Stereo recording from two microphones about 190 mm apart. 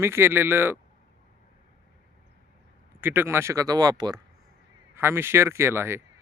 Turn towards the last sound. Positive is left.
turn(degrees=-10)  # may be behind; listen again after turning